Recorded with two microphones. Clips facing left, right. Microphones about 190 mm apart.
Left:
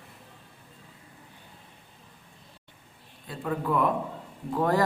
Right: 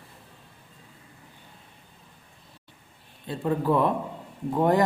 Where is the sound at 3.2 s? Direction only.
30° right (ahead or behind).